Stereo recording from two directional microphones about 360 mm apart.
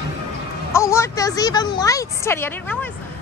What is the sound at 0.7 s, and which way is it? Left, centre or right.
A woman's voice, centre.